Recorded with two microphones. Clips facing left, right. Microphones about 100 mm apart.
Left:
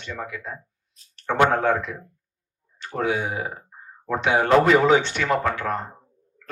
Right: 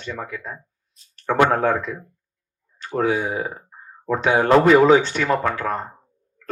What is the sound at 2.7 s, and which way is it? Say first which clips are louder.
Speech: right 3 dB; 40° right (ahead or behind).